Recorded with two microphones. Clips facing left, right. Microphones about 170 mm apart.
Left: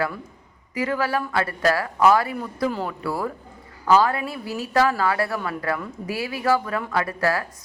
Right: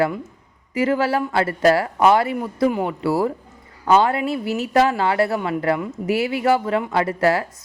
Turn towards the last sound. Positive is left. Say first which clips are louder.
# right 5 dB
turn(degrees=-25)  # may be behind; listen again after turning